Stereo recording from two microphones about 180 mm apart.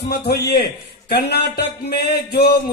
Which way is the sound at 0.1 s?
60° left (ahead or behind).